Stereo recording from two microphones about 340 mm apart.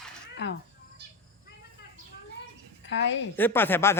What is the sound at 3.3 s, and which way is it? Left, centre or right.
Speech, centre.